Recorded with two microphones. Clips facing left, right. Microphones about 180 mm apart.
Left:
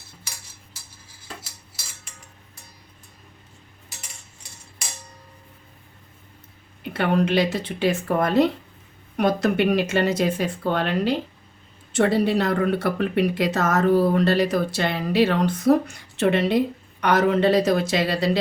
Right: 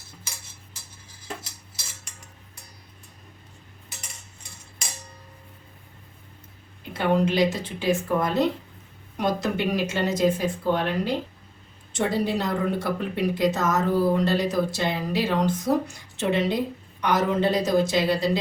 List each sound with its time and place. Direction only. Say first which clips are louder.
6.9 s a woman's voice: left 2 dB; 70° left (ahead or behind)